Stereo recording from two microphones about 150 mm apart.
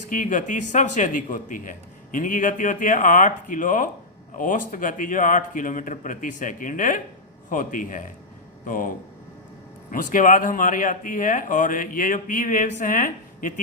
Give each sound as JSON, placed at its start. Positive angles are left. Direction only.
{"t": 0.1, "sound": "speech", "side_deg": 60}
{"t": 9.9, "sound": "speech", "side_deg": 65}